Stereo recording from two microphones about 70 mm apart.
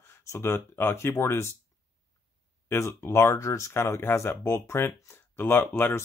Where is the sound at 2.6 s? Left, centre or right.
Left.